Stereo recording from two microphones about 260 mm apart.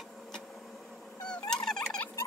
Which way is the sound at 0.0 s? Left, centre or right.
Centre.